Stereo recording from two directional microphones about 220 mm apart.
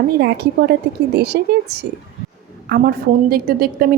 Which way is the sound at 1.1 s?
45° right (ahead or behind).